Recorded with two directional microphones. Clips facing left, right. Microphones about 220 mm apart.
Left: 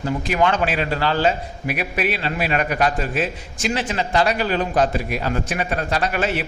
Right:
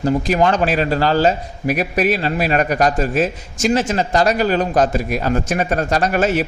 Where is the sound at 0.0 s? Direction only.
40° right (ahead or behind).